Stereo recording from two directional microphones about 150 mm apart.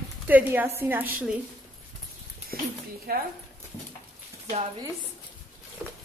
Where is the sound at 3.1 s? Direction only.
90° right.